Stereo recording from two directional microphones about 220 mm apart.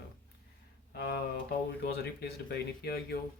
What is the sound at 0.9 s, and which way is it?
Speech, 45° left (ahead or behind).